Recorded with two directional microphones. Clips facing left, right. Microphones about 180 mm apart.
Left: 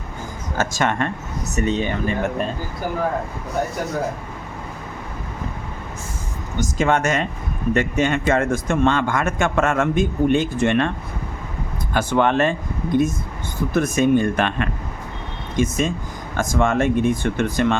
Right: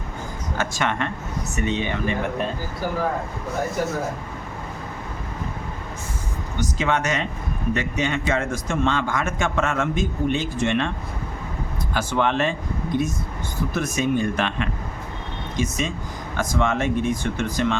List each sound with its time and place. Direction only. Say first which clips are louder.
0.5 s a man's voice: left 4 dB; 45° left (ahead or behind)
6.6 s a man's voice: left 4 dB; 45° left (ahead or behind)
11.9 s a man's voice: left 4 dB; 50° left (ahead or behind)